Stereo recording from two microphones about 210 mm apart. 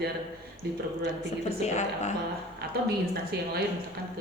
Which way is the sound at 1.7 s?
35° left (ahead or behind).